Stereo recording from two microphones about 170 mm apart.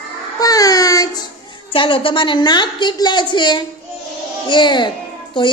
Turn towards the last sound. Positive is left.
turn(degrees=30)  # may be behind; listen again after turning